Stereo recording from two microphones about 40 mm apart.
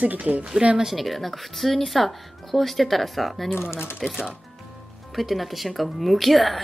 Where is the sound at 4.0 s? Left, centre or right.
Centre.